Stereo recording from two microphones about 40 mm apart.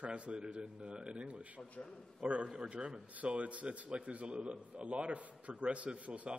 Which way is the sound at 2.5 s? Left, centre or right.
Right.